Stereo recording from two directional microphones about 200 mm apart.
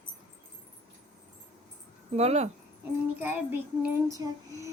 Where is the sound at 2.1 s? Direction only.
30° right (ahead or behind).